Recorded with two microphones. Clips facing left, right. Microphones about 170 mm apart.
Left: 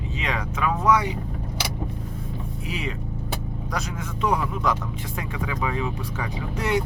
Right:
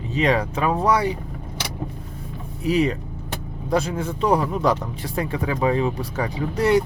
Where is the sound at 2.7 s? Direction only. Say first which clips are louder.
Right 13 dB; 40° right (ahead or behind).